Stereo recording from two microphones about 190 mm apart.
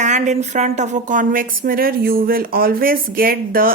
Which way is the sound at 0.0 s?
40° right (ahead or behind).